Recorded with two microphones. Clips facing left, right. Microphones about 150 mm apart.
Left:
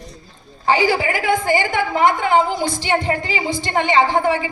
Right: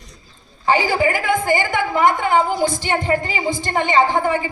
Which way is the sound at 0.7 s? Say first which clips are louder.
Even; 50° right (ahead or behind).